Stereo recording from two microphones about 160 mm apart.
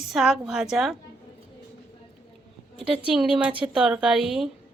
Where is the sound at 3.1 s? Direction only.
5° right (ahead or behind).